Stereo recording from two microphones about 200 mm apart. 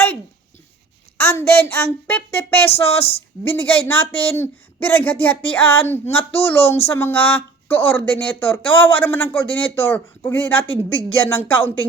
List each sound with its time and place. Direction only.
1.2 s speech: 10° left (ahead or behind)
2.8 s speech: 30° left (ahead or behind)
3.5 s speech: 10° left (ahead or behind)